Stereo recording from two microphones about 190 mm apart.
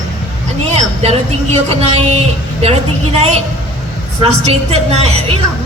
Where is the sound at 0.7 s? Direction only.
35° right (ahead or behind).